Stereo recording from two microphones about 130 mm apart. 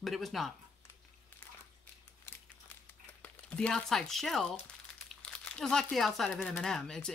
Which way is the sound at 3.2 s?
10° left (ahead or behind).